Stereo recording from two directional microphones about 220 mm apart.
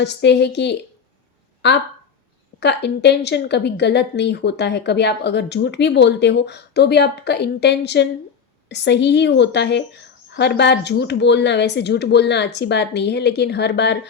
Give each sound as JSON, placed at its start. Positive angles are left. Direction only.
{"t": 0.0, "sound": "a woman's voice", "side_deg": 50}